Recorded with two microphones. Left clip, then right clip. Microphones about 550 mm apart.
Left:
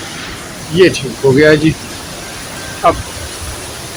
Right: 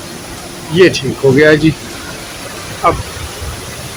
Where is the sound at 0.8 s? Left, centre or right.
Right.